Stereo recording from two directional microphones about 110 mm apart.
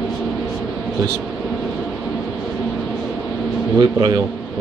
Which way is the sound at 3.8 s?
40° right (ahead or behind).